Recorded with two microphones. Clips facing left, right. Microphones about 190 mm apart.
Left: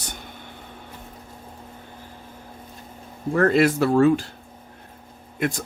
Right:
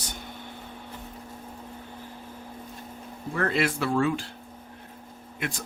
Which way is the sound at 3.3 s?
45° left (ahead or behind).